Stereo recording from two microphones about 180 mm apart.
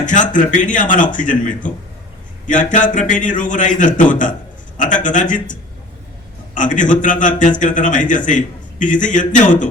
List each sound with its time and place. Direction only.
0.0 s a man's voice: 45° left (ahead or behind)